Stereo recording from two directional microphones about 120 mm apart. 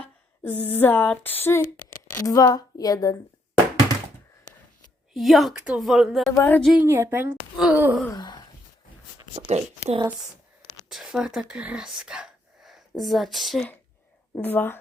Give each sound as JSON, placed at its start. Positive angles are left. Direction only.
{"t": 0.0, "sound": "a sound", "side_deg": 15}
{"t": 2.2, "sound": "speech", "side_deg": 30}
{"t": 5.1, "sound": "a woman's voice", "side_deg": 0}
{"t": 6.3, "sound": "a woman's voice", "side_deg": 20}
{"t": 6.7, "sound": "a woman's voice", "side_deg": -20}
{"t": 7.5, "sound": "wail", "side_deg": -10}
{"t": 8.1, "sound": "wail", "side_deg": 35}
{"t": 9.3, "sound": "speech", "side_deg": -65}
{"t": 10.8, "sound": "a woman's voice", "side_deg": -5}
{"t": 14.3, "sound": "speech", "side_deg": 15}